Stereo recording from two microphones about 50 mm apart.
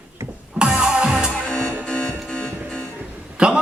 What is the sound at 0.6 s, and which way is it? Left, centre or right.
Music, centre.